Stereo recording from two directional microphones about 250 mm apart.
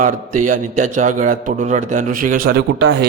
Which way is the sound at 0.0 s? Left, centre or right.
Right.